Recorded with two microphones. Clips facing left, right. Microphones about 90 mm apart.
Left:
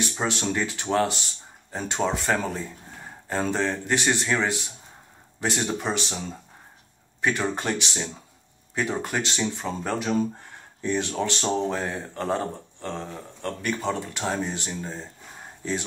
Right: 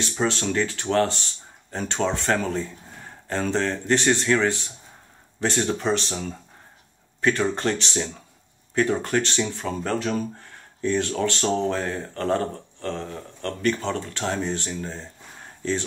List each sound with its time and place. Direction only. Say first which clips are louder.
0.2 s speech: right 4 dB; 15° left (ahead or behind)
7.2 s speech: right 3 dB; 15° left (ahead or behind)